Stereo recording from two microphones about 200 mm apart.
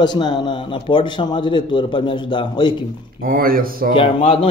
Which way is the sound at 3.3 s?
45° right (ahead or behind).